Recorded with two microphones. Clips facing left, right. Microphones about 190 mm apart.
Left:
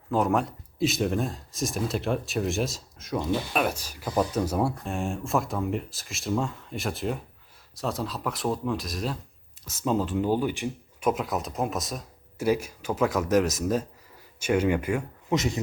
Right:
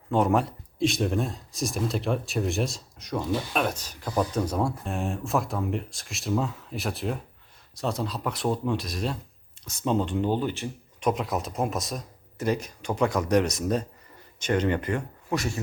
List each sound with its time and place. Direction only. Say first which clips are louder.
0.1 s speech: right 1 dB; centre (ahead or behind)
11.1 s speech: even; centre (ahead or behind)
15.3 s speech: left 3 dB; 20° left (ahead or behind)